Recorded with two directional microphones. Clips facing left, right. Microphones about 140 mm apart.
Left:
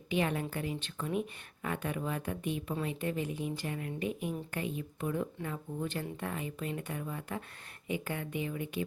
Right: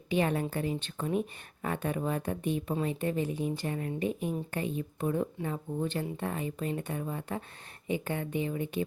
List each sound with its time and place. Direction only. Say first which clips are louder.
0.1 s a woman's voice: right 3 dB; 35° right (ahead or behind)